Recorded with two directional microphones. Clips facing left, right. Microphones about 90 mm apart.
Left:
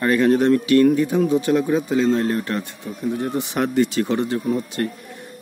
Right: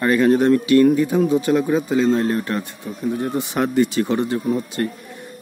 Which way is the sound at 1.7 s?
30° right (ahead or behind).